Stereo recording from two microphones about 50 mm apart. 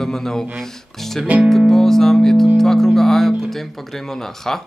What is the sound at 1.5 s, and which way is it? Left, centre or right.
Speech, centre.